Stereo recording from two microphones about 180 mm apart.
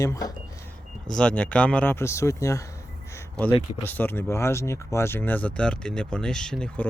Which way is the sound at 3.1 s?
15° left (ahead or behind).